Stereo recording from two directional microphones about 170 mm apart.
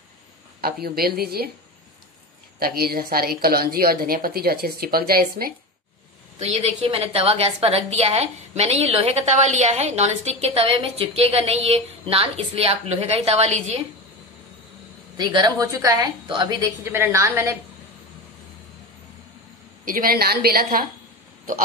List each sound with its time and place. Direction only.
0.8 s a woman's voice: 65° right (ahead or behind)
2.6 s a woman's voice: 60° right (ahead or behind)
6.3 s a woman's voice: 40° right (ahead or behind)
15.1 s a woman's voice: 25° right (ahead or behind)
19.8 s a woman's voice: 55° right (ahead or behind)